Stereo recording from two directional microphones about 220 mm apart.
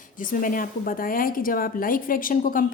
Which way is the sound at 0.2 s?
40° left (ahead or behind).